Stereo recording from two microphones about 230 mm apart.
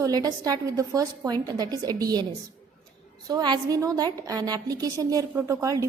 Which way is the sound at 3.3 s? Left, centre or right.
Centre.